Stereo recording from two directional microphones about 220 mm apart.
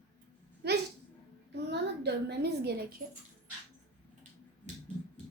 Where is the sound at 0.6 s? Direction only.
45° right (ahead or behind).